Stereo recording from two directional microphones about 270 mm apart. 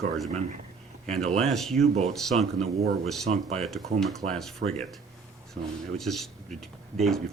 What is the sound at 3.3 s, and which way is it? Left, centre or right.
Speech, right.